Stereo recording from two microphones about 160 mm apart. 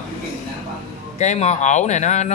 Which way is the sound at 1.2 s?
45° left (ahead or behind).